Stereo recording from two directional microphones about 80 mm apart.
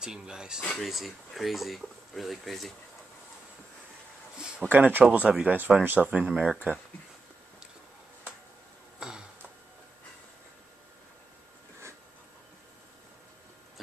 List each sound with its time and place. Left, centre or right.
0.0 s speech: centre
4.6 s speech: right